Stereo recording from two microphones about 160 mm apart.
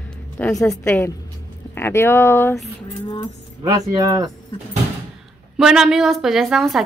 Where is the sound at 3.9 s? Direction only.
20° right (ahead or behind).